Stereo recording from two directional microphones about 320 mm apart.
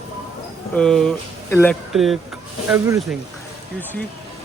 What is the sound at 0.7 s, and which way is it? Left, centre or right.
Speech, centre.